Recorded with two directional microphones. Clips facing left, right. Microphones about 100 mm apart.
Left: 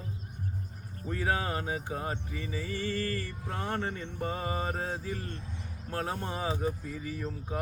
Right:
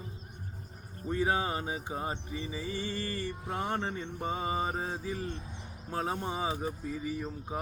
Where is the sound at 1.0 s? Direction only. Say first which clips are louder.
Right 1 dB; 20° right (ahead or behind).